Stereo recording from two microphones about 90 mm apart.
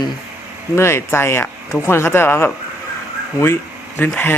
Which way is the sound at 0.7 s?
30° left (ahead or behind).